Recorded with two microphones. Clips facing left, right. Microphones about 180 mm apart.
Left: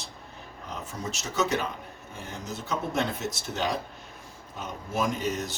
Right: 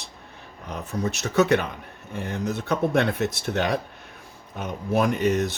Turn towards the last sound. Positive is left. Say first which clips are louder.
# right 7 dB
turn(degrees=-65)  # may be behind; listen again after turning